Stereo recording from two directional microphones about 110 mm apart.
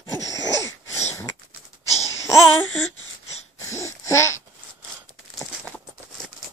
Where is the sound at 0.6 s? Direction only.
30° left (ahead or behind).